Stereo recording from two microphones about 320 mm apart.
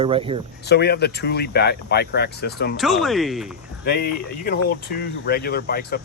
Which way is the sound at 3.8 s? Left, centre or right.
Left.